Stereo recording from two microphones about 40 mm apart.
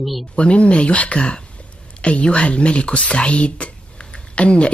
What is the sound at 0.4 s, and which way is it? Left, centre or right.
Speech, left.